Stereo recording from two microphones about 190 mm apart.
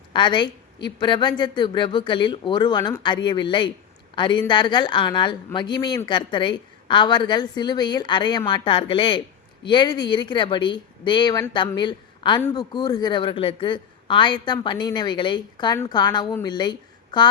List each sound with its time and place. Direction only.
0.1 s a woman's voice: 25° left (ahead or behind)
12.4 s a man's voice: 10° left (ahead or behind)
12.7 s a woman's voice: 20° left (ahead or behind)